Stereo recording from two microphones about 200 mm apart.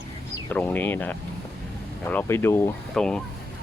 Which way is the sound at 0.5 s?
10° left (ahead or behind).